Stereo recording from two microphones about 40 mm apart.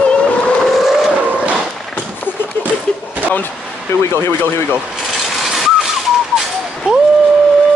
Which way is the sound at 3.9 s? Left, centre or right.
Left.